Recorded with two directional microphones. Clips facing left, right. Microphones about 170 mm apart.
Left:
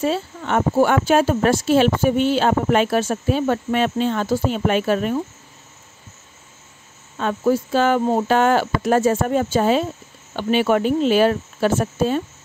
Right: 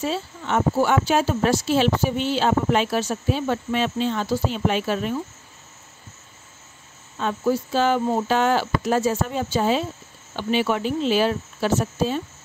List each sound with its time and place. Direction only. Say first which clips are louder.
0.0 s speech: left 5 dB; 55° left (ahead or behind)
7.2 s speech: left 3 dB; 55° left (ahead or behind)